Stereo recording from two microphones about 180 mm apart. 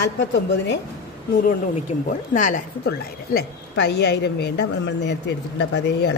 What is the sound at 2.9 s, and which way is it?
A woman's voice, 70° left (ahead or behind).